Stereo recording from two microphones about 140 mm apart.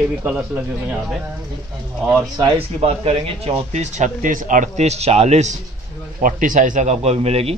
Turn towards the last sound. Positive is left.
turn(degrees=-50)  # may be behind; listen again after turning